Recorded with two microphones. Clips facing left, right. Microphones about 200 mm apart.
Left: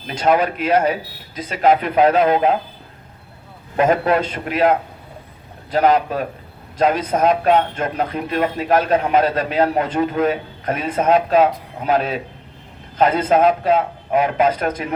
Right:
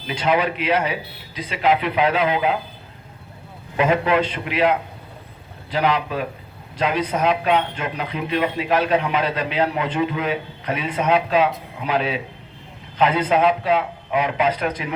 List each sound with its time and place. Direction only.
0.1 s a man's voice: 45° left (ahead or behind)
3.8 s a man's voice: 45° left (ahead or behind)